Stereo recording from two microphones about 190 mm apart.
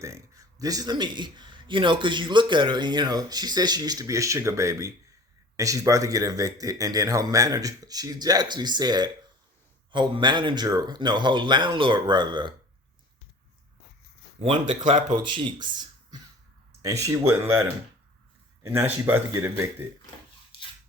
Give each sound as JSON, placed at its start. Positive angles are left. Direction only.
{"t": 0.0, "sound": "speech", "side_deg": -15}
{"t": 14.7, "sound": "speech", "side_deg": -40}
{"t": 15.1, "sound": "speech", "side_deg": -25}